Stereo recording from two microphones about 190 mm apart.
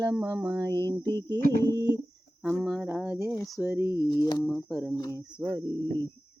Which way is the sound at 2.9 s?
5° right (ahead or behind).